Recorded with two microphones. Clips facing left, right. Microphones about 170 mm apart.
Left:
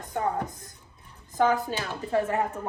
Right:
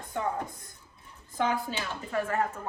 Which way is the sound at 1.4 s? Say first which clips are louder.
Left 5 dB; 40° left (ahead or behind).